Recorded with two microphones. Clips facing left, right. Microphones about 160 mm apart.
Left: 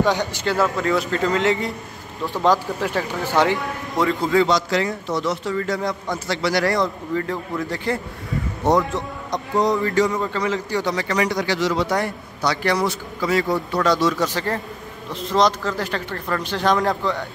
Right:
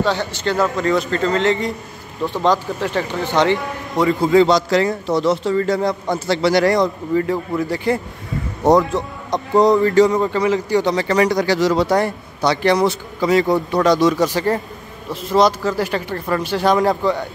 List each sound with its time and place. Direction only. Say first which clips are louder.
0.0 s a man's voice: right 1 dB; 15° left (ahead or behind); by 4.3 s 5° right (ahead or behind)
4.3 s speech: right 6 dB; 30° right (ahead or behind); by 8.0 s 10° right (ahead or behind)
8.6 s a man's voice: right 5 dB; 35° right (ahead or behind)
10.1 s speech: right 6 dB; 15° right (ahead or behind)